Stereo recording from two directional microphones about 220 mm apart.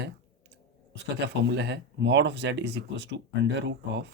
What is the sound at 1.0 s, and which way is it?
Speech, 55° right (ahead or behind).